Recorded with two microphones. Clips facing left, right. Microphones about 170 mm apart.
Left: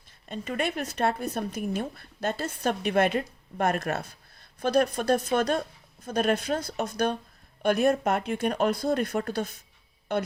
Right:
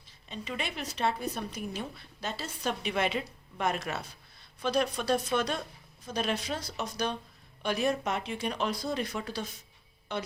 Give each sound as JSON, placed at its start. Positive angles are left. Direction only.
{"t": 0.3, "sound": "a woman's voice", "side_deg": 50}